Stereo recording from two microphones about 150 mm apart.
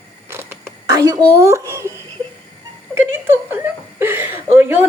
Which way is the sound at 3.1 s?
15° right (ahead or behind).